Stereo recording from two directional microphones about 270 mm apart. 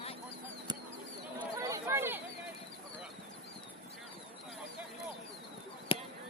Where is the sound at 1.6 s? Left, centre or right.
Centre.